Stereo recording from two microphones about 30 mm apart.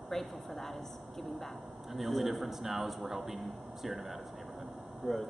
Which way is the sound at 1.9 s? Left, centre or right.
Centre.